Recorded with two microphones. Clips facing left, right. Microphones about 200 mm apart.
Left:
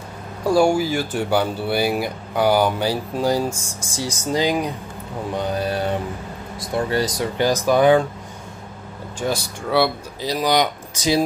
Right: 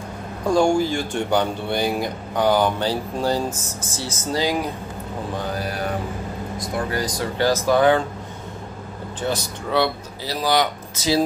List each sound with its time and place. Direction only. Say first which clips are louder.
0.5 s speech: left 1 dB; 10° left (ahead or behind)
9.2 s speech: left 1 dB; 10° left (ahead or behind)